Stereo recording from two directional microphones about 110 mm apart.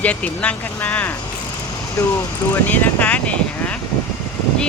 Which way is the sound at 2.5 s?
15° left (ahead or behind).